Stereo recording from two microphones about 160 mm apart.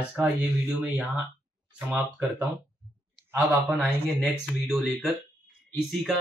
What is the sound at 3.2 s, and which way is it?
Speech, 15° right (ahead or behind).